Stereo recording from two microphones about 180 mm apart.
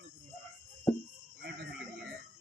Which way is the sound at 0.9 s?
15° left (ahead or behind).